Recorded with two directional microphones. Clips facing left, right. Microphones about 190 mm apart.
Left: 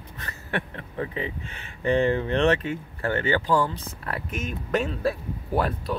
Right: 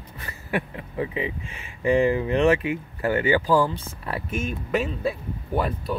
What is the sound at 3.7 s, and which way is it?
Speech, 25° right (ahead or behind).